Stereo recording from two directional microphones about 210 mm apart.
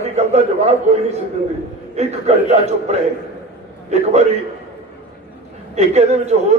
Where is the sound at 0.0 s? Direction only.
30° right (ahead or behind).